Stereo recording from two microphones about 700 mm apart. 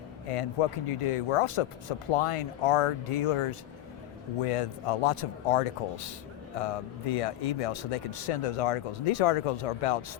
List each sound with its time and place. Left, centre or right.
0.3 s speech: left